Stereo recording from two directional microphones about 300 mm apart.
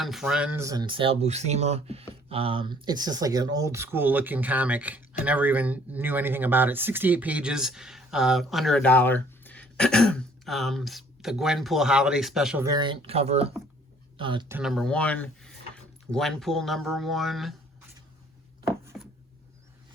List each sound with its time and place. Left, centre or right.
0.0 s speech: centre
12.7 s speech: centre